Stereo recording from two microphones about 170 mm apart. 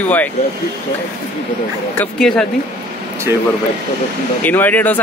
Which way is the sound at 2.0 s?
5° left (ahead or behind).